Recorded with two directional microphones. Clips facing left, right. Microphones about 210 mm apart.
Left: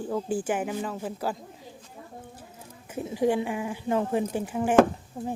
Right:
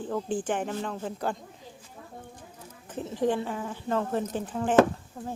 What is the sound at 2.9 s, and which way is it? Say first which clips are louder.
Speech: left 2 dB; 10° left (ahead or behind).